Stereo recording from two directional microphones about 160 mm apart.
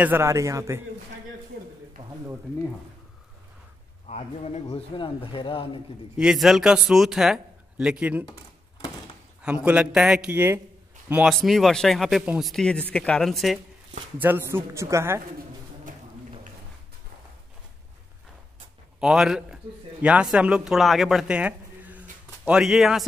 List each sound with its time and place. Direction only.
0.0 s a man's voice: 15° right (ahead or behind)
4.1 s a man's voice: 45° left (ahead or behind)
6.1 s a man's voice: 5° right (ahead or behind)
9.4 s a man's voice: 5° right (ahead or behind)
11.2 s a man's voice: centre (ahead or behind)
14.1 s a man's voice: 10° right (ahead or behind)
18.9 s a man's voice: 5° right (ahead or behind)